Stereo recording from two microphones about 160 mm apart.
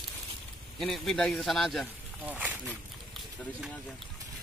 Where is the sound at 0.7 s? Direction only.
Centre (ahead or behind).